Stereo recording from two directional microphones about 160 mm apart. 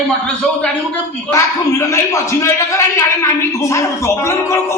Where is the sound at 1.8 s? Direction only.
20° left (ahead or behind).